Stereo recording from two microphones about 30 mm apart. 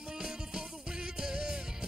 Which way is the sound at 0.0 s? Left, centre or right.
Right.